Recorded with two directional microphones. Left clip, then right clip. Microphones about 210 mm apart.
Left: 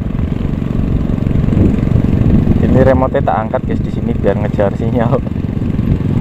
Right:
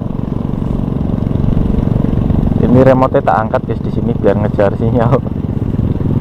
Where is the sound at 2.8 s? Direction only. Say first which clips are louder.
Right 2 dB; 35° right (ahead or behind).